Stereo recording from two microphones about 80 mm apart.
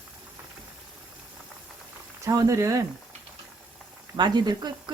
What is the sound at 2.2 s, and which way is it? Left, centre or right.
Speech, right.